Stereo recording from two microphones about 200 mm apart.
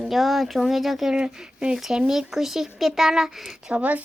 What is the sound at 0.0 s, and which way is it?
Speech, centre (ahead or behind).